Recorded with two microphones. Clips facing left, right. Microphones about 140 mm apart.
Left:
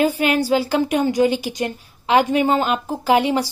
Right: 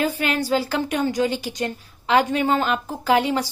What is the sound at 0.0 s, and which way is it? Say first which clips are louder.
A woman's voice: left 5 dB; 10° left (ahead or behind).